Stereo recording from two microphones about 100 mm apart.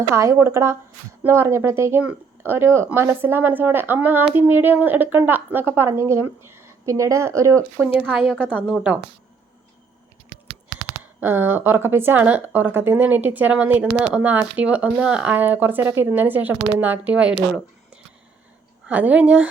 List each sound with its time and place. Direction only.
0.2 s a woman's voice: 25° right (ahead or behind)
7.8 s speech: 15° right (ahead or behind)
10.3 s computer keyboard: 55° right (ahead or behind)
10.8 s speech: 10° right (ahead or behind)
18.9 s speech: 15° right (ahead or behind)